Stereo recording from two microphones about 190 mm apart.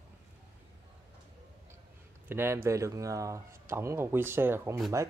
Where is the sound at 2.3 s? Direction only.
10° right (ahead or behind).